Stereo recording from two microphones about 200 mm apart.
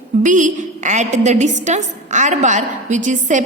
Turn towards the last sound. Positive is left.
turn(degrees=-40)  # may be behind; listen again after turning